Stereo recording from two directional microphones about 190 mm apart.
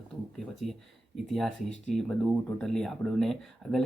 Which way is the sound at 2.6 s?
Centre (ahead or behind).